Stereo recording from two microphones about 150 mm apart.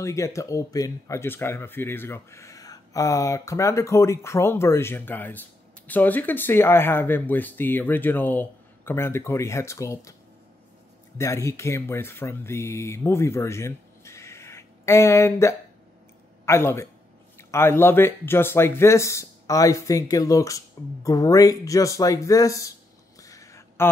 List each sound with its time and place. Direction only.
0.0 s speech: 20° left (ahead or behind)
11.1 s speech: 20° left (ahead or behind)
23.2 s a sound: 20° left (ahead or behind)